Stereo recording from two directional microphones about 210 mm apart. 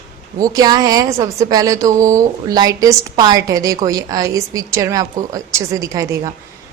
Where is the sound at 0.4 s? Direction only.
15° right (ahead or behind).